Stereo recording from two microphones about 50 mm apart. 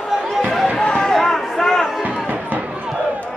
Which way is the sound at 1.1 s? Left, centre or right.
Centre.